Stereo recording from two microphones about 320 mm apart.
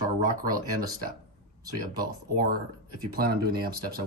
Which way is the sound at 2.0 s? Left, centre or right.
Right.